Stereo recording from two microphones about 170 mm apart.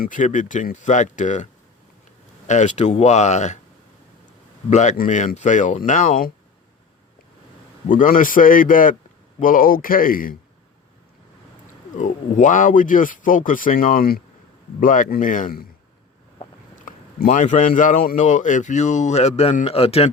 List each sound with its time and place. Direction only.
0.0 s speech: 50° left (ahead or behind)
2.5 s speech: 45° left (ahead or behind)
4.7 s speech: 45° left (ahead or behind)
7.9 s speech: 50° left (ahead or behind)
11.9 s speech: 50° left (ahead or behind)
16.8 s speech: 50° left (ahead or behind); by 20.1 s 35° left (ahead or behind)